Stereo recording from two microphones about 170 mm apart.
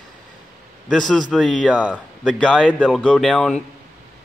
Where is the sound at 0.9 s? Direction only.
Centre (ahead or behind).